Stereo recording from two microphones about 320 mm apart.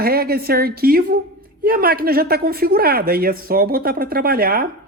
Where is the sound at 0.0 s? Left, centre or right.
Right.